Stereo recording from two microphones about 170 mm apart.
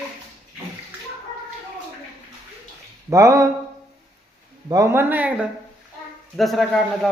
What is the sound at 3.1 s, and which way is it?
Speech, 20° right (ahead or behind).